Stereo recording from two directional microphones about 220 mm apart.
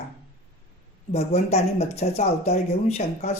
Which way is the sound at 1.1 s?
30° left (ahead or behind).